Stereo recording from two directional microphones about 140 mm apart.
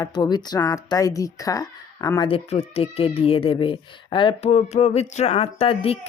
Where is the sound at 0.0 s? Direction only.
30° left (ahead or behind).